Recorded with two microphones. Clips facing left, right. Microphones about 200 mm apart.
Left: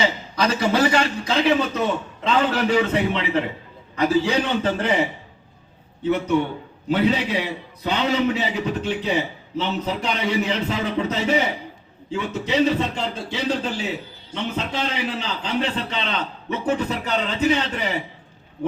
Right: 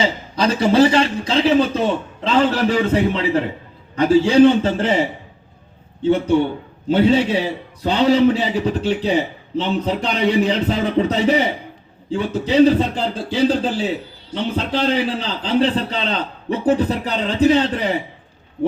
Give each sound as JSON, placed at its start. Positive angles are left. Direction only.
{"t": 0.3, "sound": "a man's voice", "side_deg": -30}